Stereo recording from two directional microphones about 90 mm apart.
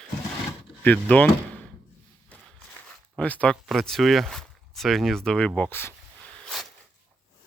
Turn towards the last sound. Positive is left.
turn(degrees=0)  # may be behind; listen again after turning